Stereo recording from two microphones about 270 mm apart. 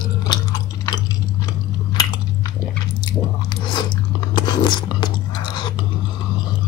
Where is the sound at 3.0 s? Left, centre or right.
Centre.